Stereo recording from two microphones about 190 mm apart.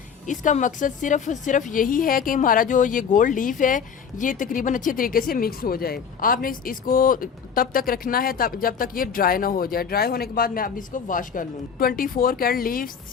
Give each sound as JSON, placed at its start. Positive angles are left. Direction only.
{"t": 0.3, "sound": "a woman's voice", "side_deg": 40}